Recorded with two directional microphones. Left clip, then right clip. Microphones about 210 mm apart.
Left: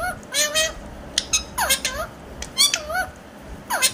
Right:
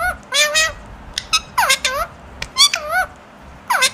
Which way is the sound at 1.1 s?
30° right (ahead or behind).